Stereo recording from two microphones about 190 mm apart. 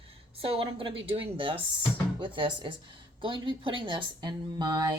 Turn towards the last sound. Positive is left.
turn(degrees=-25)  # may be behind; listen again after turning